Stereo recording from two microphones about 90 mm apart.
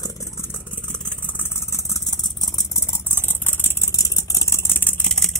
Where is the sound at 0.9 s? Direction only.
15° left (ahead or behind); by 2.7 s 50° left (ahead or behind).